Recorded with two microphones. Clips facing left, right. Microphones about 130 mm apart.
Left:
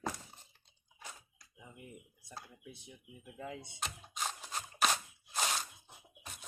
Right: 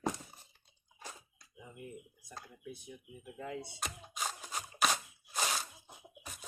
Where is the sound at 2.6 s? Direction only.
25° left (ahead or behind).